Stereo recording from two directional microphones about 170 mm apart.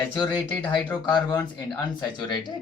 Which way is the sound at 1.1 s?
25° left (ahead or behind).